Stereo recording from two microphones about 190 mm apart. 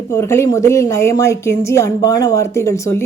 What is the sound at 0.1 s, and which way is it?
A woman's voice, 15° left (ahead or behind).